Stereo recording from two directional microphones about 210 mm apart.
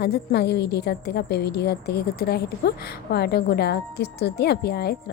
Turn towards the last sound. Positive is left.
turn(degrees=50)  # may be behind; listen again after turning